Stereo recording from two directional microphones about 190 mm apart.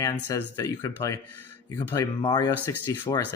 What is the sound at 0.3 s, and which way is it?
Speech, 15° left (ahead or behind).